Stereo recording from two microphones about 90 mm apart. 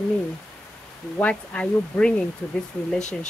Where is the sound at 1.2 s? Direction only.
15° left (ahead or behind).